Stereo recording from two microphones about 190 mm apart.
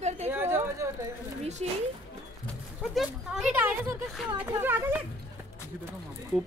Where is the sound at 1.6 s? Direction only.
35° right (ahead or behind).